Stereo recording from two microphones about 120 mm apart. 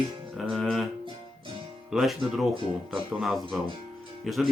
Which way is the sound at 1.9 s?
Centre (ahead or behind).